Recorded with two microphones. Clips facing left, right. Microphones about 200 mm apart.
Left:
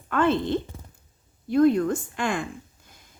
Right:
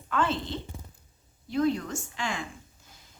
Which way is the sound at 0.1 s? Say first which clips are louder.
Left 7 dB; 55° left (ahead or behind).